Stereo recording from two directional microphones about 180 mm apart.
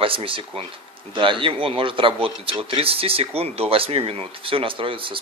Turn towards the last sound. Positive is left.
turn(degrees=-30)  # may be behind; listen again after turning